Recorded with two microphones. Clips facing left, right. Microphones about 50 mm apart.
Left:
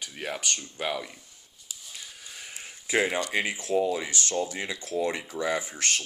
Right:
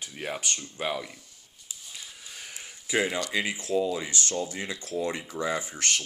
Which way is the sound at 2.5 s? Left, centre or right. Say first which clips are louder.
Left 1 dB; centre.